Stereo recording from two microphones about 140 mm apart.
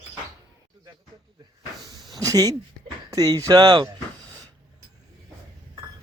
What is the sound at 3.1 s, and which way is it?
Speech, 25° right (ahead or behind).